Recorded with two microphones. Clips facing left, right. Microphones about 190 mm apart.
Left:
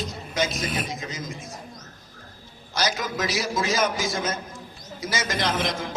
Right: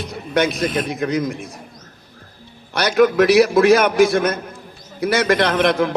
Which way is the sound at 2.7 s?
65° right (ahead or behind).